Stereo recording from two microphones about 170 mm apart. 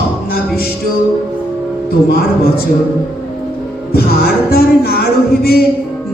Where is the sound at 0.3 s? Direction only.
65° left (ahead or behind).